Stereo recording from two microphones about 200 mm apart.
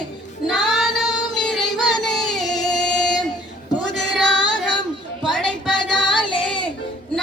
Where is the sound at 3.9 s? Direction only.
Centre (ahead or behind).